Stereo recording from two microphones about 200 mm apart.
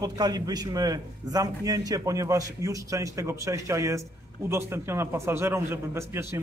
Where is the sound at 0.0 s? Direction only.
20° right (ahead or behind).